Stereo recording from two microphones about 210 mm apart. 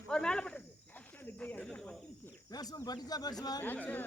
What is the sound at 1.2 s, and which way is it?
Snake, 10° left (ahead or behind).